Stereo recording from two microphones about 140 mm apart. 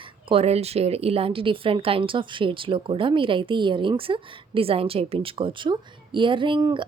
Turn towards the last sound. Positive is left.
turn(degrees=-35)  # may be behind; listen again after turning